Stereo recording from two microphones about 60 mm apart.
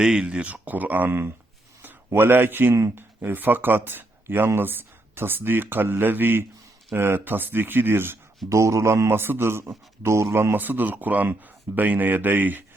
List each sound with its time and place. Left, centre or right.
0.0 s a man's voice: centre; by 8.2 s right
8.4 s speech: right
9.0 s a man's voice: right